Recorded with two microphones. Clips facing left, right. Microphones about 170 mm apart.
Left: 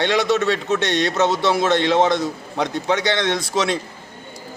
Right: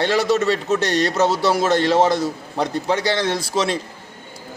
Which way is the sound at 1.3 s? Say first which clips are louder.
Even; 10° right (ahead or behind).